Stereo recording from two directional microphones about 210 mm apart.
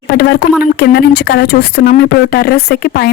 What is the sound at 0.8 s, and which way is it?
Speech, 50° left (ahead or behind).